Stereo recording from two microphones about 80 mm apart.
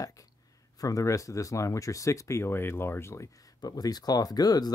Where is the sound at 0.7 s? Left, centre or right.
Left.